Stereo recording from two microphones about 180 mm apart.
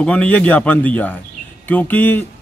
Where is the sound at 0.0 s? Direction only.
5° left (ahead or behind).